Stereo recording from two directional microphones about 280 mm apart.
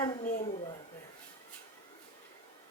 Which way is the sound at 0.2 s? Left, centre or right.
Left.